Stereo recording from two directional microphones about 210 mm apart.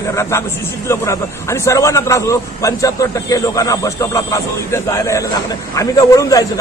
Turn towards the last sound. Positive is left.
turn(degrees=15)  # may be behind; listen again after turning